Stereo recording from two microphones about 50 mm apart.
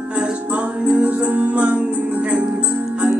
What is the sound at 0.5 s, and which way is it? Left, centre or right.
Music, right.